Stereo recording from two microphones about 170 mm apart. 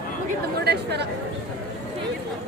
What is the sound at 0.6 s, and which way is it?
Chatter, 80° right.